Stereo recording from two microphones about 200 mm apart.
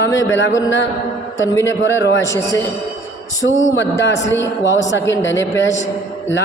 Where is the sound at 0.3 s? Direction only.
65° left (ahead or behind).